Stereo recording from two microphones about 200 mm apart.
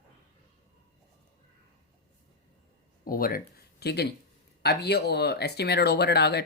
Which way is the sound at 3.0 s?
45° left (ahead or behind).